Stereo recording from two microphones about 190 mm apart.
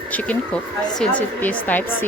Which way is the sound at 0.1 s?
5° left (ahead or behind).